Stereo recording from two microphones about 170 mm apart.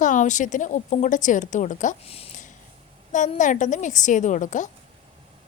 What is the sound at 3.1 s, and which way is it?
A woman's voice, 50° left (ahead or behind).